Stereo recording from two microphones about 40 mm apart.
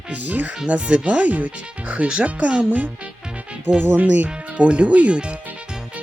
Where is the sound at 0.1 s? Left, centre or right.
Right.